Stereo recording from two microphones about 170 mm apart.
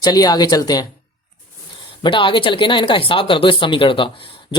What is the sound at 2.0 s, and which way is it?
Speech, 30° left (ahead or behind).